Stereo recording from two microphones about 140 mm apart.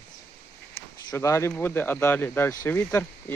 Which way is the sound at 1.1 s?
20° left (ahead or behind).